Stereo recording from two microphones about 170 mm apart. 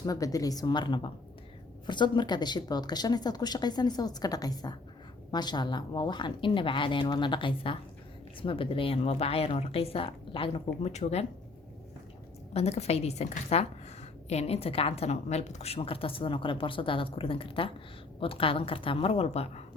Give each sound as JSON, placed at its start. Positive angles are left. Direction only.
{"t": 0.0, "sound": "a woman's voice", "side_deg": 20}
{"t": 12.5, "sound": "a woman's voice", "side_deg": 40}